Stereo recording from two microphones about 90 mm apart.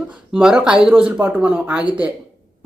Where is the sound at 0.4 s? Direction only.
10° right (ahead or behind).